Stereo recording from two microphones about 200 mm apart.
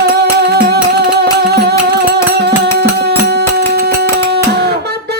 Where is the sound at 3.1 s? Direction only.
55° right (ahead or behind).